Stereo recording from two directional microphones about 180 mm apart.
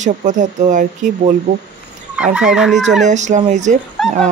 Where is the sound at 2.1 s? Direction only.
5° right (ahead or behind).